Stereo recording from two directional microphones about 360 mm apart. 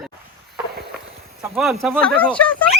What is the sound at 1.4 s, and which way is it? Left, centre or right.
Speech, centre.